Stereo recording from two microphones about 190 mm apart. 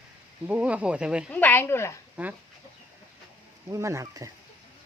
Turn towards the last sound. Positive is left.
turn(degrees=-15)  # may be behind; listen again after turning